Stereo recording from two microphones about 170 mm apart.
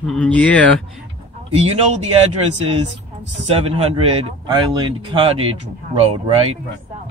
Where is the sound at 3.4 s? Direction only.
35° right (ahead or behind).